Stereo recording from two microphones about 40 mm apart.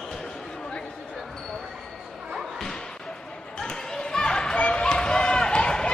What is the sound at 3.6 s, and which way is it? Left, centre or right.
Basketball bounce, centre.